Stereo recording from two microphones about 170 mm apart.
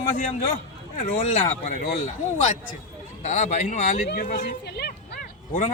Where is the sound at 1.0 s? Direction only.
45° left (ahead or behind).